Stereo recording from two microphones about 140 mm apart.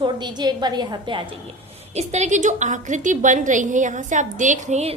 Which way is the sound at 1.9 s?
50° right (ahead or behind).